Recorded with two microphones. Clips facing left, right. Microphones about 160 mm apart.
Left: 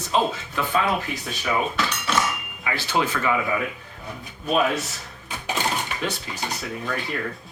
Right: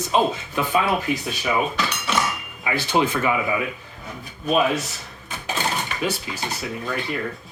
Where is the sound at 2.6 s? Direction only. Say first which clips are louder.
Right 3 dB; 20° right (ahead or behind).